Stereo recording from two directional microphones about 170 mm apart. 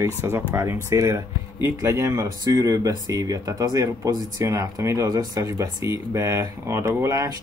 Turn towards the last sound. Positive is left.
turn(degrees=-20)  # may be behind; listen again after turning